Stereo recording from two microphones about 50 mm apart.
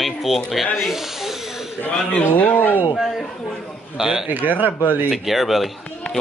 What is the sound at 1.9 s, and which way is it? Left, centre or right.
Speech, left.